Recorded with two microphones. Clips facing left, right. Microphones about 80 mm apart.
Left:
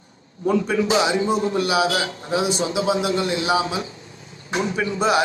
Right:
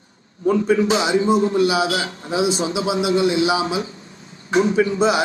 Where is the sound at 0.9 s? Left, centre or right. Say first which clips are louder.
Right 2 dB; left.